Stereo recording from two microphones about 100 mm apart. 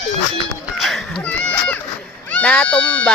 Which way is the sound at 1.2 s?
15° left (ahead or behind).